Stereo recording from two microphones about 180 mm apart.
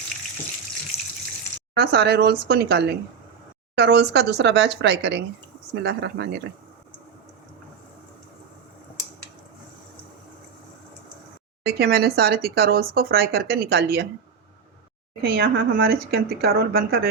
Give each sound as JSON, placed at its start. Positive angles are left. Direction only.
{"t": 0.9, "sound": "water", "side_deg": 35}
{"t": 1.7, "sound": "speech", "side_deg": -65}
{"t": 11.6, "sound": "speech", "side_deg": -65}
{"t": 15.2, "sound": "speech", "side_deg": -55}